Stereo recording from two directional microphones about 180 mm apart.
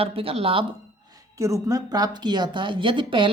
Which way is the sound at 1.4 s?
20° right (ahead or behind).